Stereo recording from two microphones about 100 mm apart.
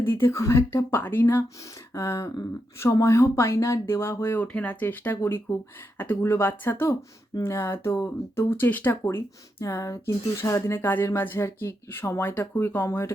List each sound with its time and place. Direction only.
0.0 s speech: 25° left (ahead or behind)
1.9 s a sound: 30° left (ahead or behind)
2.3 s speech: 30° left (ahead or behind)